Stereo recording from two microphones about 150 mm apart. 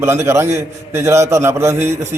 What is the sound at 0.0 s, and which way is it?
A man's voice, 15° right (ahead or behind).